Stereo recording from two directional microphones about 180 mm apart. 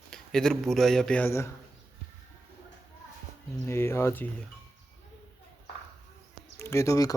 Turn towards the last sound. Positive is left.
turn(degrees=20)  # may be behind; listen again after turning